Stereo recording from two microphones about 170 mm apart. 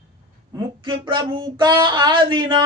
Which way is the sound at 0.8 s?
30° right (ahead or behind).